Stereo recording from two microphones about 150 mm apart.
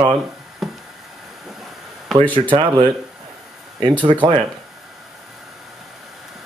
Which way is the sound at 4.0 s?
35° right (ahead or behind).